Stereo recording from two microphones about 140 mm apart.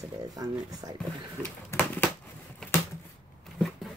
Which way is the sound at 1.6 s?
15° left (ahead or behind).